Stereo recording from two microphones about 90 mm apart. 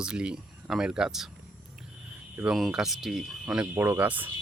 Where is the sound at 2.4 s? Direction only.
5° right (ahead or behind).